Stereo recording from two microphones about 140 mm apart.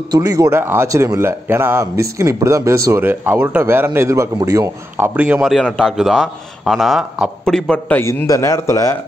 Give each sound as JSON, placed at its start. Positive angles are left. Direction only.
{"t": 0.1, "sound": "a man's voice", "side_deg": -25}
{"t": 5.5, "sound": "a man's voice", "side_deg": 5}
{"t": 8.3, "sound": "speech", "side_deg": 20}